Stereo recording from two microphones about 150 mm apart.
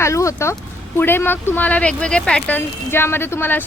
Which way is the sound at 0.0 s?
20° left (ahead or behind).